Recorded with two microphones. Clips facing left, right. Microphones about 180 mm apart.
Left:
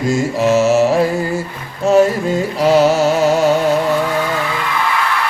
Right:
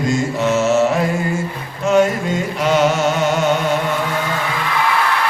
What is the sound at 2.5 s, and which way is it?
Music, 35° left (ahead or behind).